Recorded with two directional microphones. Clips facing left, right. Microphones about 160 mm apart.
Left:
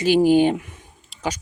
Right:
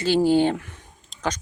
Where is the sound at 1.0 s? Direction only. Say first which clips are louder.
Even; 5° left (ahead or behind).